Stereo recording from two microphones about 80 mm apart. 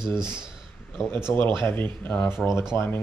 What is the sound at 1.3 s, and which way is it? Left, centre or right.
Speech, left.